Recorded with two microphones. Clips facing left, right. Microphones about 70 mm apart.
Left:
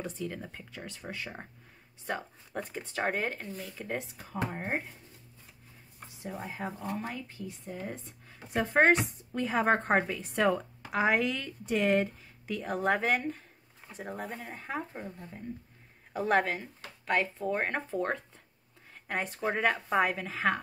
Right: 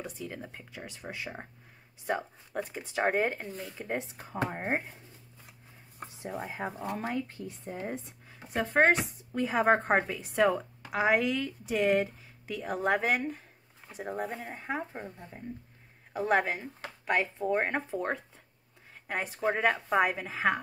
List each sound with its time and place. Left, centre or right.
0.0 s speech: centre
6.3 s speech: centre
7.3 s speech: right
8.3 s speech: centre
16.1 s speech: centre